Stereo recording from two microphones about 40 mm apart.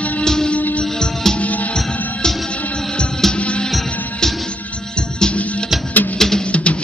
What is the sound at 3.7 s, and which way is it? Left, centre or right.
Music, centre.